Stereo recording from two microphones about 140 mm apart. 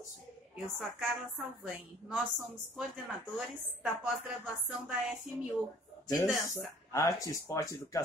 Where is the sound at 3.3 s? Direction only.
5° right (ahead or behind).